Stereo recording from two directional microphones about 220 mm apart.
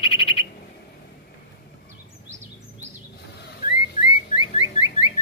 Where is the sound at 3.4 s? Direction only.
35° left (ahead or behind).